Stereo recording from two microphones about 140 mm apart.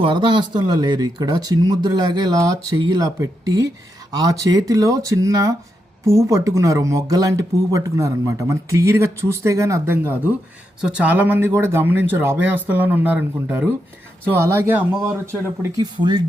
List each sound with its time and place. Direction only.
0.0 s speech: 35° right (ahead or behind); by 15.7 s 15° right (ahead or behind)
15.8 s speech: 30° right (ahead or behind)